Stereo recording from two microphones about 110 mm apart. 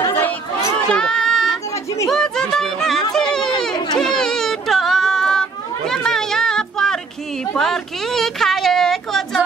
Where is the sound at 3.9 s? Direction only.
5° left (ahead or behind).